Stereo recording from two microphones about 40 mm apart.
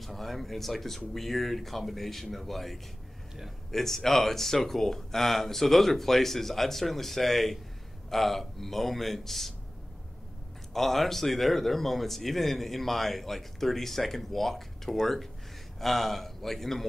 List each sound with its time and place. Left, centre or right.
0.0 s speech: centre
10.7 s speech: centre